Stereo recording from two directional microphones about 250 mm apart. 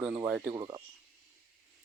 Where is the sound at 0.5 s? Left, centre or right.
Centre.